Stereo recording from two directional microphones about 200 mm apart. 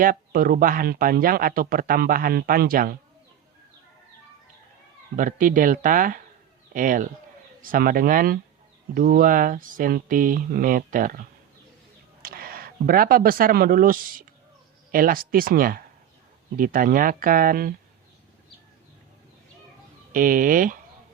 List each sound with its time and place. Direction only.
0.0 s speech: 45° right (ahead or behind)
5.1 s speech: 40° right (ahead or behind)
20.1 s speech: 45° right (ahead or behind)